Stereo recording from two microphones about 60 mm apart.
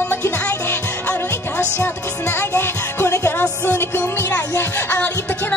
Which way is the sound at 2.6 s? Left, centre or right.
Left.